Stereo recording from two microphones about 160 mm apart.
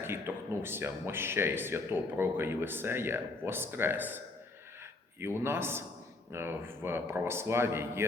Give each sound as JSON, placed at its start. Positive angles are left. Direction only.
{"t": 0.0, "sound": "speech", "side_deg": -15}
{"t": 5.2, "sound": "speech", "side_deg": -15}